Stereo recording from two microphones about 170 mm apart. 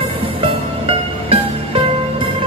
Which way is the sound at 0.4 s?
35° right (ahead or behind).